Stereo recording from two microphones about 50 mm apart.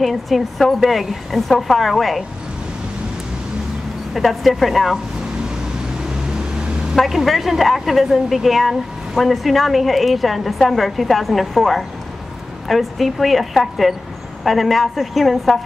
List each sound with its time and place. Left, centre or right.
0.0 s a woman's voice: centre
4.1 s a woman's voice: centre
7.0 s a woman's voice: centre